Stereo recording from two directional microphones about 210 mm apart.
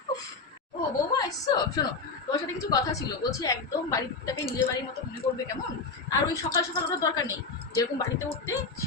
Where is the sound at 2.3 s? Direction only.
15° left (ahead or behind).